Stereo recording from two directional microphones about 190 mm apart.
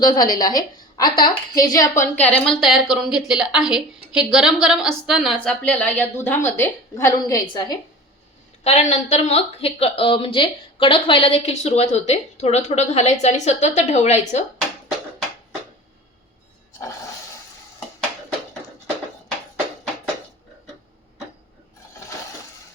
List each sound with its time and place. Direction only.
0.0 s a woman's voice: 20° left (ahead or behind)
2.2 s a woman's voice: 5° left (ahead or behind)
8.6 s a woman's voice: 35° left (ahead or behind)